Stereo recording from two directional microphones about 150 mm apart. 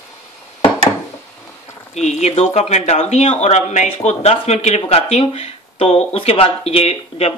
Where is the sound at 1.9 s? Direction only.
50° left (ahead or behind).